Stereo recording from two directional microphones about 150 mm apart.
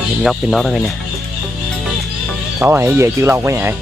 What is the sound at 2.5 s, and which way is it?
Speech, 15° right (ahead or behind).